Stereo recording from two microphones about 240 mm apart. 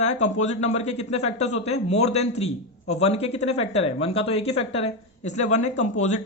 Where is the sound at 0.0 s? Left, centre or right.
Left.